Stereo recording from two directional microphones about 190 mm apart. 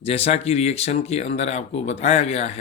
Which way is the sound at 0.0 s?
30° left (ahead or behind).